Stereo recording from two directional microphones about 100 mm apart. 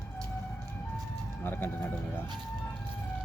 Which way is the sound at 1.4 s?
20° left (ahead or behind).